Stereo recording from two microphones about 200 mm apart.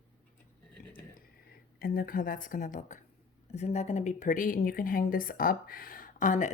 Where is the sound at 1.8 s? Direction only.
45° left (ahead or behind).